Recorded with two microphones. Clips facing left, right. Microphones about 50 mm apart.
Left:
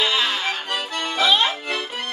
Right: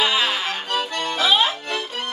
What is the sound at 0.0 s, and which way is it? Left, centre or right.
Accordion, centre.